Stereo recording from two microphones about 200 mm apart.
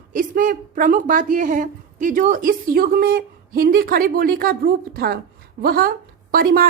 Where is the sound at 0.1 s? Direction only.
45° right (ahead or behind).